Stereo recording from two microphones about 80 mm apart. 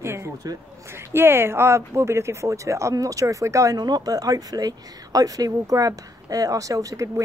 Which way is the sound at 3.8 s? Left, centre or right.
Right.